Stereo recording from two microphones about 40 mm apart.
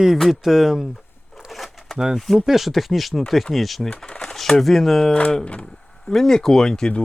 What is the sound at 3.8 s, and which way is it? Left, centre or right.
Speech, left.